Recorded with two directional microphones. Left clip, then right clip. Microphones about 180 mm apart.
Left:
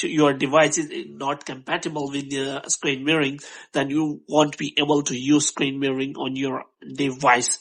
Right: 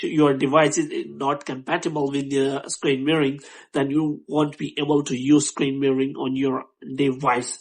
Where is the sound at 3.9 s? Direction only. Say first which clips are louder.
Left 6 dB; 30° left (ahead or behind).